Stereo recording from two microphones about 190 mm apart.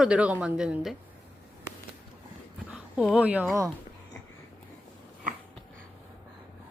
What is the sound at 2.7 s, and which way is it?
Speech, 5° right (ahead or behind).